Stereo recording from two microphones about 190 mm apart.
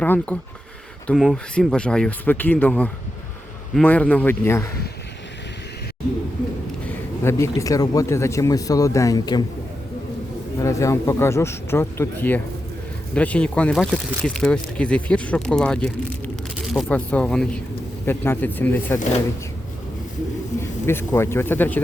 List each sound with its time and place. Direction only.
0.0 s speech: 10° left (ahead or behind)
6.8 s speech: 15° left (ahead or behind)
10.6 s speech: 15° left (ahead or behind)
20.6 s speech: 15° left (ahead or behind)